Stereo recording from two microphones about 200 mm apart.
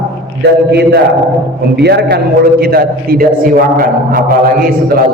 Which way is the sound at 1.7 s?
55° right (ahead or behind).